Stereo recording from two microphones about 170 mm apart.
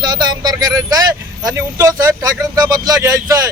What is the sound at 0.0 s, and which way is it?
Speech, 25° right (ahead or behind).